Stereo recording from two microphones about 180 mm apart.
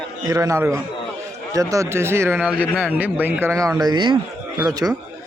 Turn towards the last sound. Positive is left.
turn(degrees=-20)  # may be behind; listen again after turning